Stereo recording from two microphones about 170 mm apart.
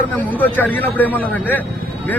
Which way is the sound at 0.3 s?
10° left (ahead or behind).